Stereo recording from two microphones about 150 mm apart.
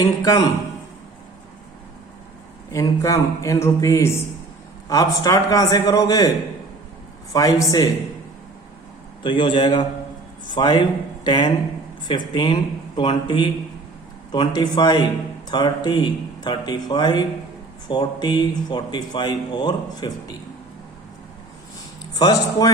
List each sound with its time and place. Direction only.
0.0 s speech: 25° left (ahead or behind)
2.7 s speech: 20° left (ahead or behind)
7.3 s speech: 25° left (ahead or behind)
9.2 s a man's voice: 35° left (ahead or behind)
22.1 s a man's voice: 25° left (ahead or behind)